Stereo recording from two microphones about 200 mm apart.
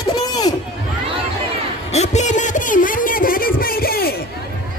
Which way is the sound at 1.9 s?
35° left (ahead or behind).